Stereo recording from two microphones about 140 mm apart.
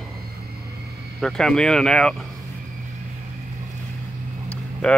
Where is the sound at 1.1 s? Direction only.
5° left (ahead or behind).